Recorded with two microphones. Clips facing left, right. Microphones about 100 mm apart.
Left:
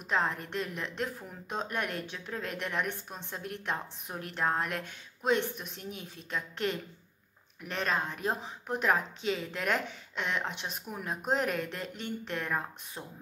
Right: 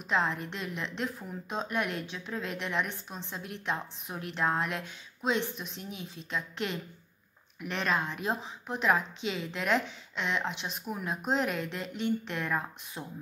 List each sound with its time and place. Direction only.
0.1 s a woman's voice: 45° left (ahead or behind)